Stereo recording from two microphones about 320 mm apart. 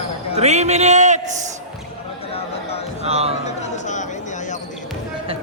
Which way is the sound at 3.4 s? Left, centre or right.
Left.